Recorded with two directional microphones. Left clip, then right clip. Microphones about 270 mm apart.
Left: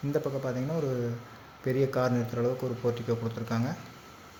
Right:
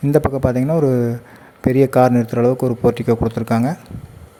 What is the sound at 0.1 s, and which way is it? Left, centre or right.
A man's voice, right.